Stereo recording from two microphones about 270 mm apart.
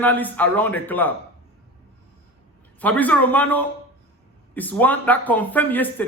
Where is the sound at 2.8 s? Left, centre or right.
Centre.